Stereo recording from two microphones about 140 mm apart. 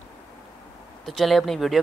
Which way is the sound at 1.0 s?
Centre (ahead or behind).